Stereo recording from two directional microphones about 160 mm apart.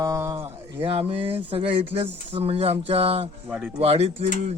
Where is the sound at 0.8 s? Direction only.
35° right (ahead or behind).